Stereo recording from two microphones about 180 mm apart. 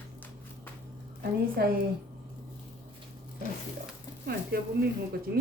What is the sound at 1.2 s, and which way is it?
Speech, 60° right (ahead or behind).